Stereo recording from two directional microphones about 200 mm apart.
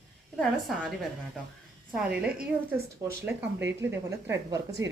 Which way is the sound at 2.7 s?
10° right (ahead or behind).